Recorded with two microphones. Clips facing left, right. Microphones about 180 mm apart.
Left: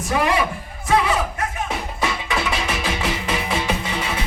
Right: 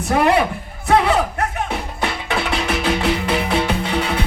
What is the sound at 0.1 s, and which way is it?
Speech, 60° right (ahead or behind).